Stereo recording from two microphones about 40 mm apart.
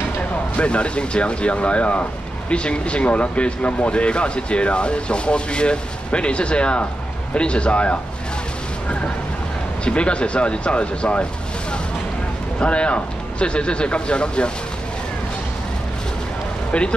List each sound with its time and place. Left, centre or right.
0.6 s speech: left
9.8 s speech: left
12.5 s speech: left